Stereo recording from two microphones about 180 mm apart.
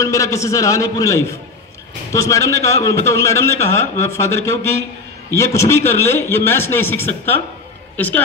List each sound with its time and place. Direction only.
0.0 s a man's voice: 15° left (ahead or behind)